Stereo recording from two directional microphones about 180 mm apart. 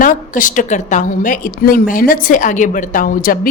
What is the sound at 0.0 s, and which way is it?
A woman's voice, 50° left (ahead or behind).